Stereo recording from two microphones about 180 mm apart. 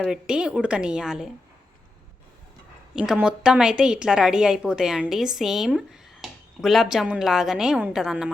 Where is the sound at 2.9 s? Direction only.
5° right (ahead or behind).